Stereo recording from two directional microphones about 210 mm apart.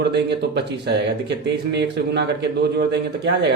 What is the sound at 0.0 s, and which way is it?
Speech, 55° right (ahead or behind).